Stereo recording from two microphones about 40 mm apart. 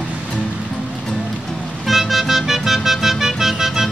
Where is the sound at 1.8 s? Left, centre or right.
Centre.